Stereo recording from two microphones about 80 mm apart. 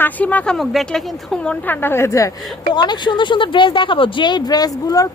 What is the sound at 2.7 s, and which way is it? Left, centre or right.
A woman's voice, left.